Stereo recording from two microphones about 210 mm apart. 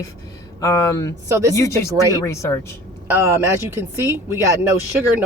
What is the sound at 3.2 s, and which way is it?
Speech, 15° right (ahead or behind).